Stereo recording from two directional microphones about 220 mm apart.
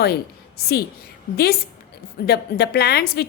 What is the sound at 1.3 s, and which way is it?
A woman's voice, 45° left (ahead or behind).